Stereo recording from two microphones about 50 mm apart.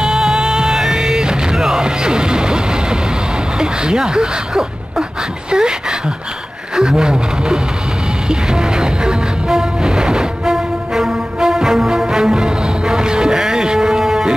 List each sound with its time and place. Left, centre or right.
0.0 s music: centre
3.5 s speech: centre
8.3 s music: centre